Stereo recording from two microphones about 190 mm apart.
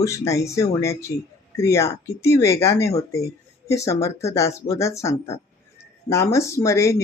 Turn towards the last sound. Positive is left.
turn(degrees=15)  # may be behind; listen again after turning